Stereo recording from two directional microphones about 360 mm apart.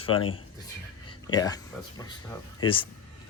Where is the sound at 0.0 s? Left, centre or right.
Centre.